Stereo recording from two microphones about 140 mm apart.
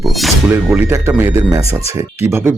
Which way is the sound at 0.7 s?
15° right (ahead or behind).